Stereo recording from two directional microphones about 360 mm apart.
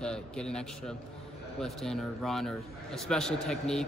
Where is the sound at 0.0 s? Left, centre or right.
Centre.